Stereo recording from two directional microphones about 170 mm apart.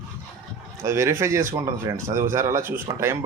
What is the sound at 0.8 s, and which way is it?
Speech, 15° right (ahead or behind).